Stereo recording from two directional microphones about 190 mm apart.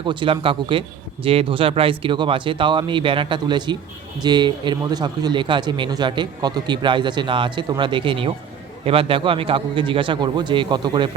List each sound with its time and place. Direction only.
0.0 s a man's voice: 25° right (ahead or behind)